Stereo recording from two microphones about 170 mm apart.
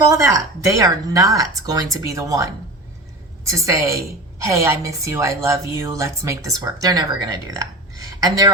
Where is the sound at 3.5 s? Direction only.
20° right (ahead or behind).